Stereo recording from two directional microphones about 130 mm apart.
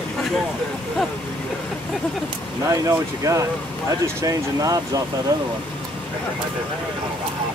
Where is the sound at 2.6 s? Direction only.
25° right (ahead or behind).